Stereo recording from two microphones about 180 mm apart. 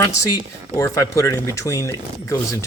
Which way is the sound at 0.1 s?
15° left (ahead or behind).